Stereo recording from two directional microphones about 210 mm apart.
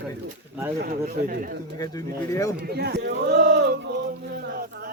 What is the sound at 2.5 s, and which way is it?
Speech, 50° right (ahead or behind).